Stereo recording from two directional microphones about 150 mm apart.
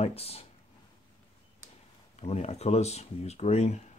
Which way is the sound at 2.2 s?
45° left (ahead or behind).